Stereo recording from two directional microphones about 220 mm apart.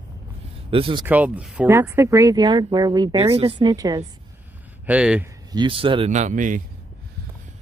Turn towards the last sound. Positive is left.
turn(degrees=-35)  # may be behind; listen again after turning